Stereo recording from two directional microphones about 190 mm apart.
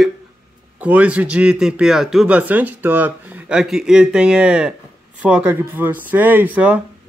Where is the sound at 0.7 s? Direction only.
5° right (ahead or behind).